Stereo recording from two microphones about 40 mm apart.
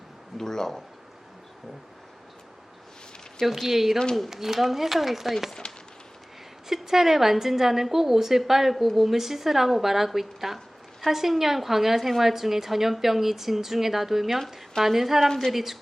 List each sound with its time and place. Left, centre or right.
0.3 s a man's voice: centre
3.4 s a woman's voice: centre
5.6 s a sound: left
6.7 s a woman's voice: centre
15.3 s a man's voice: centre
15.5 s a woman's voice: centre